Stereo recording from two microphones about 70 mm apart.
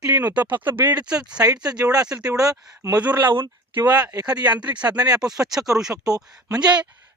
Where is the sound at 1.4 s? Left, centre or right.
Right.